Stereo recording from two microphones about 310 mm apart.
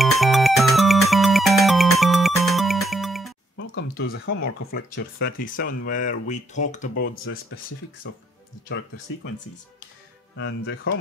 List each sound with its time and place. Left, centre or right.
0.0 s music: centre
3.5 s a sound: left
4.5 s speech: left
8.0 s speech: left
10.3 s speech: left